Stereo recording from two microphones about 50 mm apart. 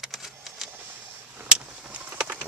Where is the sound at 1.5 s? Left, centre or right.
Centre.